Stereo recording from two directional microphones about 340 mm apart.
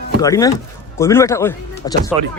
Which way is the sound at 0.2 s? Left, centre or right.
Centre.